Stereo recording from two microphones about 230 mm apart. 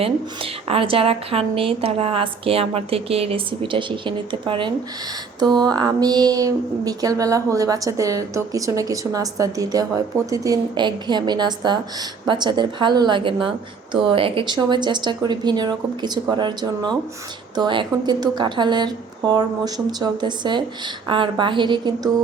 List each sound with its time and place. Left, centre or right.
0.0 s a woman's voice: right